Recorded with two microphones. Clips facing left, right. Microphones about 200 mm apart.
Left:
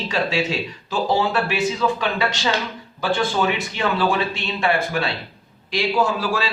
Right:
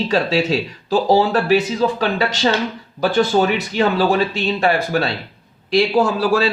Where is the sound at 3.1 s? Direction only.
40° right (ahead or behind).